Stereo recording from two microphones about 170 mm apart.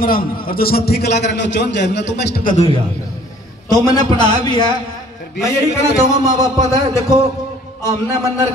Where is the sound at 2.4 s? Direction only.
40° left (ahead or behind).